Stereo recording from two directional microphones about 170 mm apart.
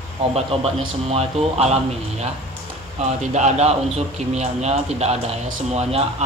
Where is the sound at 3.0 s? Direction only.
40° right (ahead or behind).